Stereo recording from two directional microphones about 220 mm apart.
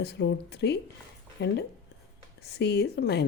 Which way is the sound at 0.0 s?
50° left (ahead or behind).